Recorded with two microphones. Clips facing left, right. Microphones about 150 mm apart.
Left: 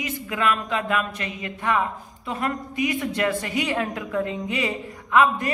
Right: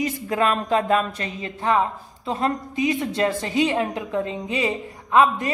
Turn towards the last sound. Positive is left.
turn(degrees=-25)  # may be behind; listen again after turning